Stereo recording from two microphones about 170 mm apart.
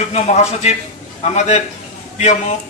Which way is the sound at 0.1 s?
40° left (ahead or behind).